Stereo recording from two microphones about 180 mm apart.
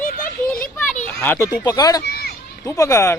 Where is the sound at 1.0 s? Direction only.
10° left (ahead or behind).